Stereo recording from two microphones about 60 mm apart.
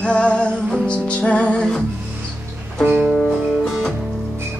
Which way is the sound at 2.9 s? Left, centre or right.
Centre.